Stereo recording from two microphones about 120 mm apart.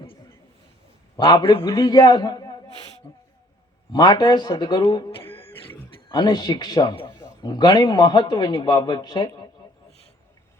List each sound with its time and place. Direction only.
1.2 s a man's voice: 40° left (ahead or behind)
5.2 s a sound: 20° left (ahead or behind)
6.1 s speech: 35° left (ahead or behind)